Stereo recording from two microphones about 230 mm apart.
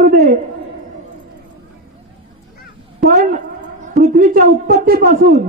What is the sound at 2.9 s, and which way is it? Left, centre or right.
A woman's voice, right.